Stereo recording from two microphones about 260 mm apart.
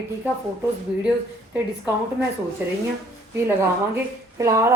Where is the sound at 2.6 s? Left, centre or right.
Centre.